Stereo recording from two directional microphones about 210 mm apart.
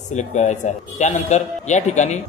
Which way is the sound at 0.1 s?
35° left (ahead or behind).